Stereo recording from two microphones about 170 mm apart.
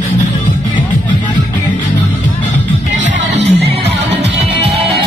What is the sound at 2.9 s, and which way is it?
Music, 90° right.